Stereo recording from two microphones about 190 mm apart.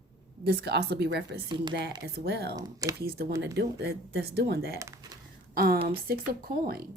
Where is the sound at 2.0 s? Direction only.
60° right (ahead or behind).